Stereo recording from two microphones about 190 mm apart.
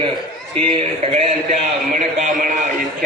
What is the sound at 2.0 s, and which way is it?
Speech, 40° right (ahead or behind).